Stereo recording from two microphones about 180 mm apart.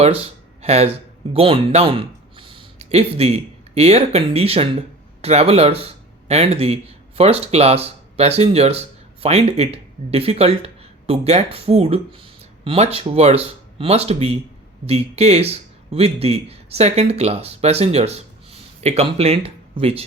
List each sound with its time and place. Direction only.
0.6 s speech: 35° right (ahead or behind)